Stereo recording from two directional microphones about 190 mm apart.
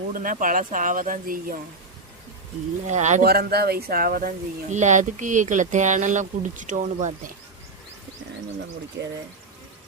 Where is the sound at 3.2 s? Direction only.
55° right (ahead or behind).